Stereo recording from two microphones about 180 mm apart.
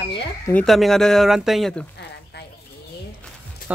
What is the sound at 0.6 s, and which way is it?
Speech, centre (ahead or behind).